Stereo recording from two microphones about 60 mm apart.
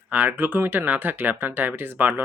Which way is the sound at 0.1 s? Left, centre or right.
Right.